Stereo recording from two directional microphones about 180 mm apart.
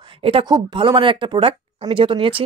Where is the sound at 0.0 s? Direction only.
30° right (ahead or behind).